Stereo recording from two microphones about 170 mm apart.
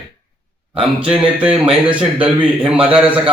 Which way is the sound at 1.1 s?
5° right (ahead or behind).